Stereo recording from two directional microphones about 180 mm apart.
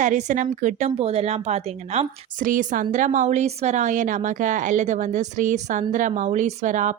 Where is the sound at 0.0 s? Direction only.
40° right (ahead or behind).